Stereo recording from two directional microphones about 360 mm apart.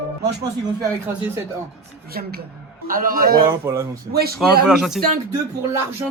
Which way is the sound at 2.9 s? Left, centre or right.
Right.